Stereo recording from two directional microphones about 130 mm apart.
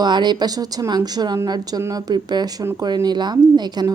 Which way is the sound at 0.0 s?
35° right (ahead or behind).